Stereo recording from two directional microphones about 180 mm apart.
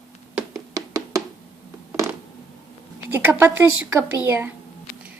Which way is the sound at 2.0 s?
15° right (ahead or behind).